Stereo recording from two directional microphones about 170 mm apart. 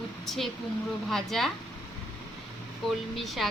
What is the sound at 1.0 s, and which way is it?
Speech, centre (ahead or behind).